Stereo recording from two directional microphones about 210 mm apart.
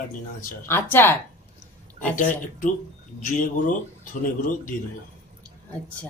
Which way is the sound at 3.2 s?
40° left (ahead or behind).